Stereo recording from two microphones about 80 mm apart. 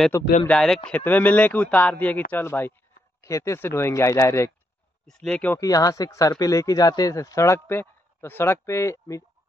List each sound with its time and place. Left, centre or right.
0.1 s speech: left
0.5 s speech: centre
0.8 s speech: left
3.2 s speech: left
5.3 s speech: left
5.6 s speech: left